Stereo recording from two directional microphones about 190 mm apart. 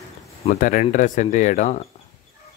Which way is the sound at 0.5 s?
45° left (ahead or behind).